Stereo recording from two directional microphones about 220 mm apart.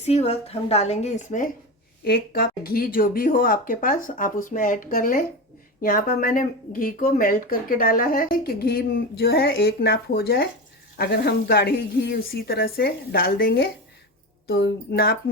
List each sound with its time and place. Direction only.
0.0 s a woman's voice: 30° left (ahead or behind); by 15.2 s 45° left (ahead or behind)